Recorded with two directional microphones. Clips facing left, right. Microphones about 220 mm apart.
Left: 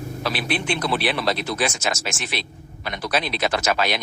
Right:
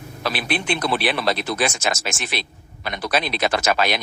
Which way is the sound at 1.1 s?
50° right (ahead or behind).